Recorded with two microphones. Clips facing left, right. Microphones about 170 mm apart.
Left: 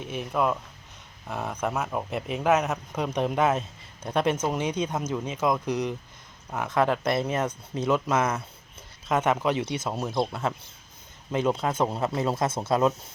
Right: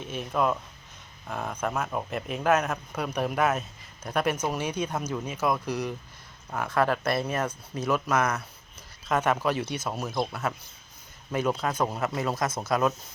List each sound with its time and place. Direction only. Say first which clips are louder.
0.0 s speech: left 1 dB; 15° left (ahead or behind)